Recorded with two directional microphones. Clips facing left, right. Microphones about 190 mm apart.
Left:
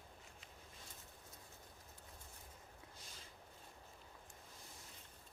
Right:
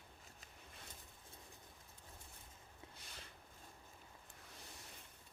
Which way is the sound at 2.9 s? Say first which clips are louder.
Right 1 dB; 65° right (ahead or behind).